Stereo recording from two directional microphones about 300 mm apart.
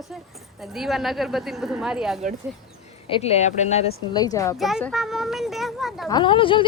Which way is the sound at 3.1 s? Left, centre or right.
Left.